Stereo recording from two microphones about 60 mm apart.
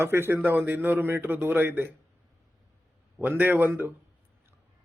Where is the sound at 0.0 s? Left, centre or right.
Right.